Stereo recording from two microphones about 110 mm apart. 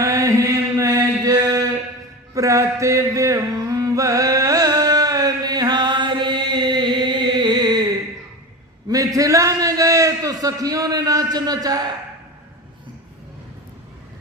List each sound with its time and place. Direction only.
0.0 s chant: 30° right (ahead or behind)
2.3 s music: 30° right (ahead or behind)
8.9 s a sound: 30° right (ahead or behind)